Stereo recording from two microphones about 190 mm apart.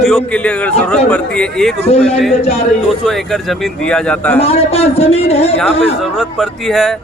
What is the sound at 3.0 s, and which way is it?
Speech, centre (ahead or behind).